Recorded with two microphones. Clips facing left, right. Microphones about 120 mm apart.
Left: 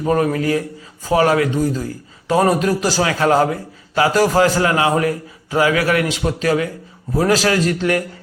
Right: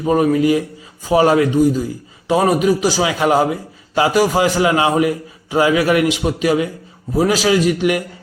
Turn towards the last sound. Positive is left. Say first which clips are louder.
# right 2 dB
turn(degrees=-10)  # may be behind; listen again after turning